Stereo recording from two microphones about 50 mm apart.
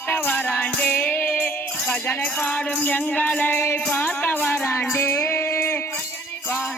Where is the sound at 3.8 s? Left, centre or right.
Left.